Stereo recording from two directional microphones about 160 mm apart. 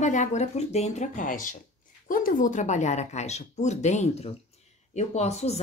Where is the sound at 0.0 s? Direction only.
50° left (ahead or behind).